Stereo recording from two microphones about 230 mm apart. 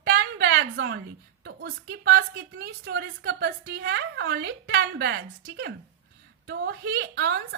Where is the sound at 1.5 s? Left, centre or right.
Right.